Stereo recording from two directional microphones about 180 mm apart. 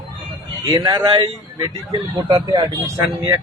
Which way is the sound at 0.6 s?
20° right (ahead or behind).